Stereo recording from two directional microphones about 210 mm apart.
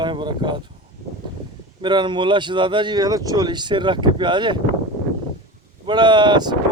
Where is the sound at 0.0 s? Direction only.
20° right (ahead or behind).